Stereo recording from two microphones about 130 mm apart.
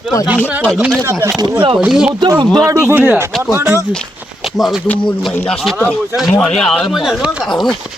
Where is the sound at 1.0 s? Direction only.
20° right (ahead or behind).